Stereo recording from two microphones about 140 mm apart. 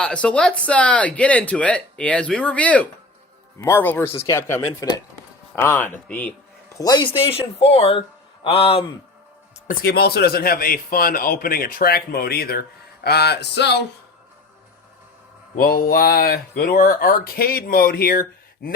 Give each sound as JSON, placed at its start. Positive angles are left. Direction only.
{"t": 0.0, "sound": "speech", "side_deg": 5}
{"t": 6.7, "sound": "speech", "side_deg": 30}
{"t": 7.3, "sound": "a man's voice", "side_deg": 45}
{"t": 9.6, "sound": "speech", "side_deg": 90}
{"t": 15.6, "sound": "speech", "side_deg": 90}